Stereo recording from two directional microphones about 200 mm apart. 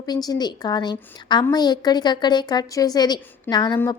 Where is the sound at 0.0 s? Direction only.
20° left (ahead or behind).